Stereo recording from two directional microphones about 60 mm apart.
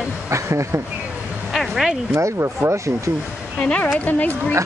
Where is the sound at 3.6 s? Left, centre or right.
Centre.